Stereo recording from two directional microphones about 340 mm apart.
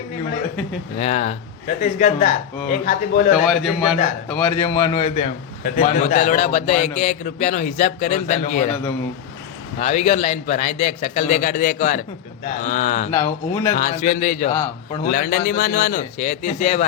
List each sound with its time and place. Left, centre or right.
0.9 s speech: centre
3.3 s a man's voice: centre; by 8.6 s left
9.8 s speech: left
13.1 s a man's voice: centre
13.7 s speech: left
14.5 s a man's voice: centre
15.0 s speech: left